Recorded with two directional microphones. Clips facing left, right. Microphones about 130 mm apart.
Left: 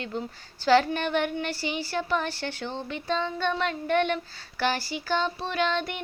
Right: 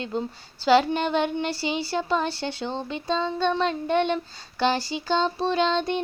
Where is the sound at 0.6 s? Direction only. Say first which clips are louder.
Right 2 dB; 15° right (ahead or behind).